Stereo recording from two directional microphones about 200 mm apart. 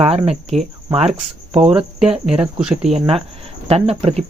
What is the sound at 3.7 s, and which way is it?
Speech, 30° right (ahead or behind).